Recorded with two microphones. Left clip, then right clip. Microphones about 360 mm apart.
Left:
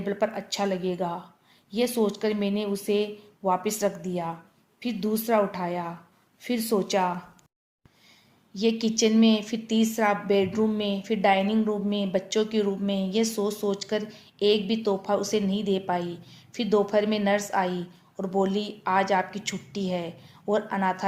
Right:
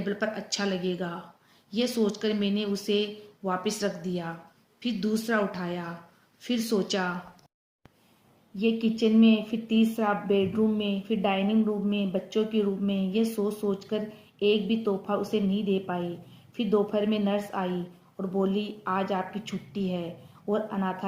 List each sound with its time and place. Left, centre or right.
0.0 s a woman's voice: centre
8.5 s a woman's voice: centre
15.2 s speech: left
16.6 s a woman's voice: centre